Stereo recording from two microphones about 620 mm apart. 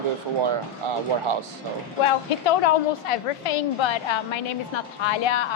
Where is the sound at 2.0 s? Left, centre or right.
Left.